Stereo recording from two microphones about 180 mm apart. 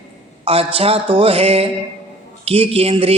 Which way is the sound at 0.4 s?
35° right (ahead or behind).